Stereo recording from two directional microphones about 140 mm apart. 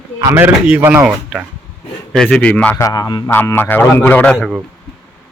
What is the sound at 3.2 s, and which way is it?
Speech, 15° left (ahead or behind).